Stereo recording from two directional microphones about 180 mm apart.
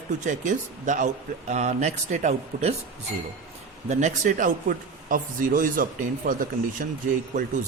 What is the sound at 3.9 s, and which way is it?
Speech, 40° right (ahead or behind).